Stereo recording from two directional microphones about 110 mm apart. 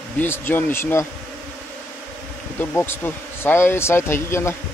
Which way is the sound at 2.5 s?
20° left (ahead or behind).